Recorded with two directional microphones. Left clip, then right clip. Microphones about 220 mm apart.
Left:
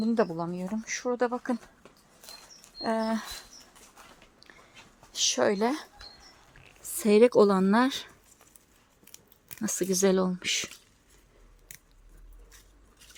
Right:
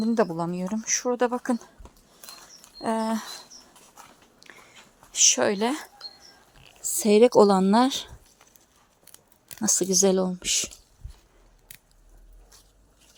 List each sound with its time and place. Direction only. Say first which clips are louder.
0.0 s speech: right 3 dB; 15° right (ahead or behind)
4.0 s dog: right 4 dB; 15° right (ahead or behind)
5.3 s speech: right 2 dB; 5° right (ahead or behind)
7.0 s speech: right 3 dB; centre (ahead or behind)
9.5 s speech: right 6 dB; 5° right (ahead or behind)
11.7 s a sound: right 1 dB; centre (ahead or behind)